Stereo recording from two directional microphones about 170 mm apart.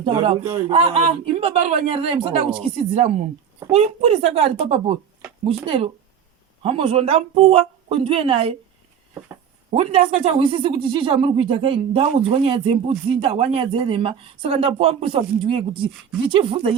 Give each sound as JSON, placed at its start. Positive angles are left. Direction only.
{"t": 0.7, "sound": "speech", "side_deg": -35}
{"t": 9.7, "sound": "speech", "side_deg": -35}